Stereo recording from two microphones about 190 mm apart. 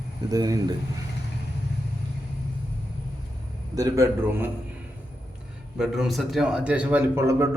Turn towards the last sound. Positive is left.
turn(degrees=-15)  # may be behind; listen again after turning